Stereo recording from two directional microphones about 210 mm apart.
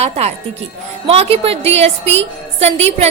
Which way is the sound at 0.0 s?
30° right (ahead or behind).